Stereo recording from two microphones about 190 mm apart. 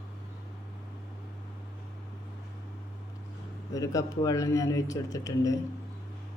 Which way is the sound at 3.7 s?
15° left (ahead or behind).